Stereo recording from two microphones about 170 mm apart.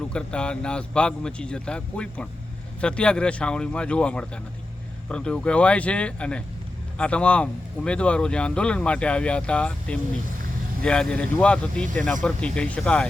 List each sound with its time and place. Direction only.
0.1 s speech: 5° left (ahead or behind)